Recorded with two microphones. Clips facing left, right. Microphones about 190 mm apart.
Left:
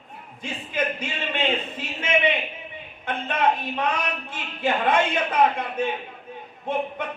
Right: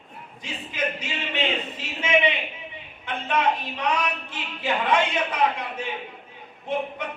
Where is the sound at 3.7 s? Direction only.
50° left (ahead or behind).